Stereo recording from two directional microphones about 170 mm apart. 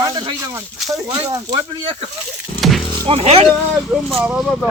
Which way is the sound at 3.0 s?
35° right (ahead or behind).